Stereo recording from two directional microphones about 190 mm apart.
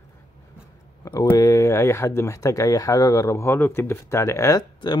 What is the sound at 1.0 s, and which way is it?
Speech, 20° left (ahead or behind).